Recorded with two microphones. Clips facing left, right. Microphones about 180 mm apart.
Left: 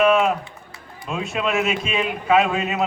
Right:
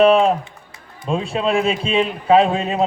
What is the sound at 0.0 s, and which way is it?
A man's voice, 30° right (ahead or behind).